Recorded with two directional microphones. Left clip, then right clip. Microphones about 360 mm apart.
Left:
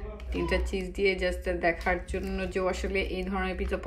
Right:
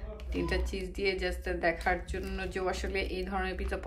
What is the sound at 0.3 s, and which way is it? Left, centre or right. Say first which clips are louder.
Speech: left 4 dB; centre.